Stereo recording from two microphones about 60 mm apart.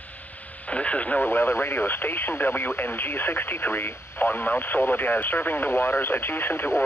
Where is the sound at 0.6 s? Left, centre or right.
Centre.